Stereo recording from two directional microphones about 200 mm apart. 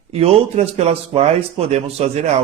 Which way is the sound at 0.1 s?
30° right (ahead or behind).